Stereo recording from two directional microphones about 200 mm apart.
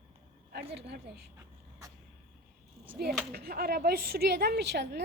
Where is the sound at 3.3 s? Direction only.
50° right (ahead or behind).